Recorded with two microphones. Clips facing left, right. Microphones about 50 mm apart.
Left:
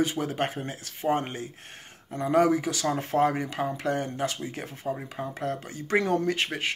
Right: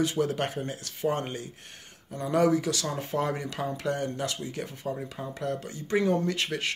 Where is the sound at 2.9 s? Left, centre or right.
Left.